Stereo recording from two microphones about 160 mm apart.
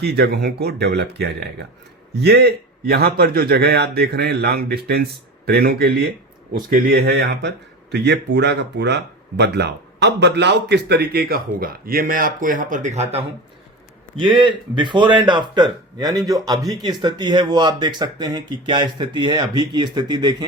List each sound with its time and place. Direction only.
0.0 s speech: 85° right
2.2 s a man's voice: 80° right; by 13.2 s 40° right (ahead or behind)
14.3 s speech: 30° right (ahead or behind)